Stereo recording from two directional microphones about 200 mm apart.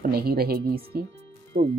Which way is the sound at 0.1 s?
50° right (ahead or behind).